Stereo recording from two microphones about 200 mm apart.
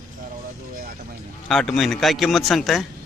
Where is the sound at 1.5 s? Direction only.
Centre (ahead or behind).